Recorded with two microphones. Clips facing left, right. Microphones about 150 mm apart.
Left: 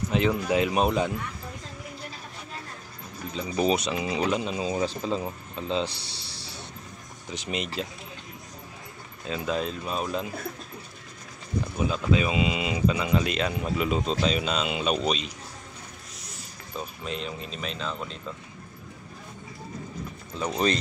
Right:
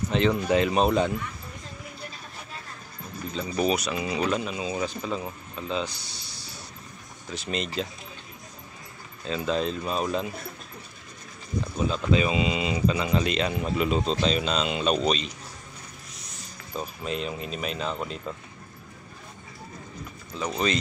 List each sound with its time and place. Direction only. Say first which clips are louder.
0.1 s speech: right 2 dB; 5° left (ahead or behind)
3.3 s speech: left 1 dB; 20° left (ahead or behind)
7.2 s speech: right 1 dB; 15° left (ahead or behind)
9.3 s speech: right 2 dB; 5° left (ahead or behind)
11.7 s speech: right 1 dB; 5° left (ahead or behind)
16.7 s speech: right 3 dB; centre (ahead or behind)
20.3 s speech: left 1 dB; centre (ahead or behind)